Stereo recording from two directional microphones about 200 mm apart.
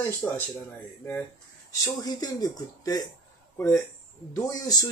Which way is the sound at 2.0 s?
20° left (ahead or behind).